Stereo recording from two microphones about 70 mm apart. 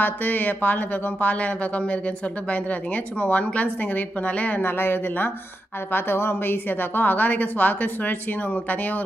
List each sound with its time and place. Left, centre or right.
0.0 s speech: left